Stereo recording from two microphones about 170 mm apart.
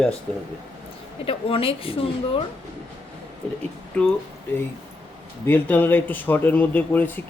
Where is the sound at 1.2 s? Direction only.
35° left (ahead or behind).